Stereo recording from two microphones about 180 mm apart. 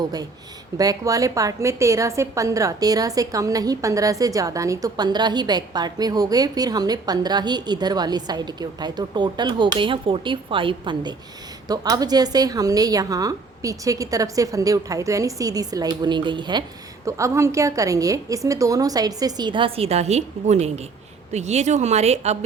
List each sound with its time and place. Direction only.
0.0 s a woman's voice: 20° right (ahead or behind); by 22.4 s 35° right (ahead or behind)